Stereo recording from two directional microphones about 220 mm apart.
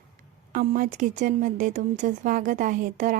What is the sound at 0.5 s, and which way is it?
Speech, 35° right (ahead or behind).